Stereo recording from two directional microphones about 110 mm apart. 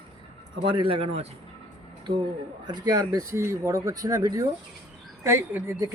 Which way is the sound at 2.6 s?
40° right (ahead or behind).